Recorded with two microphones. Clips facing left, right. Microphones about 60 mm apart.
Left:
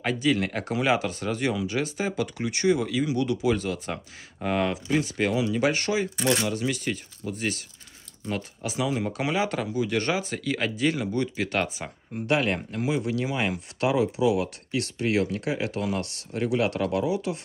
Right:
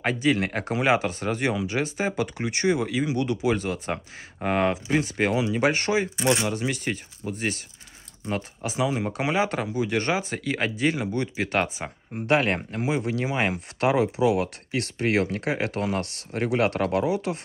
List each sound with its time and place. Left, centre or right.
0.0 s speech: right
6.1 s speech: centre
6.5 s speech: right